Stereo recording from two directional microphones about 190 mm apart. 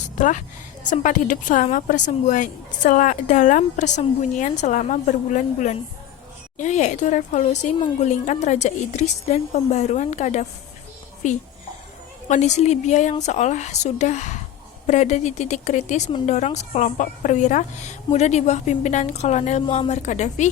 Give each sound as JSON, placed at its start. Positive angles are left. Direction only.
{"t": 0.2, "sound": "a woman's voice", "side_deg": 40}